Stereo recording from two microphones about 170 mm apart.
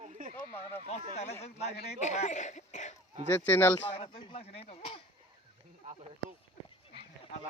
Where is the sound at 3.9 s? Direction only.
35° left (ahead or behind).